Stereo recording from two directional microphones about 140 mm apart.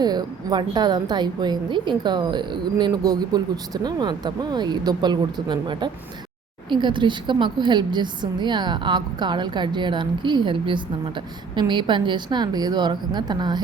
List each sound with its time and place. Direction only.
0.0 s a woman's voice: 30° right (ahead or behind)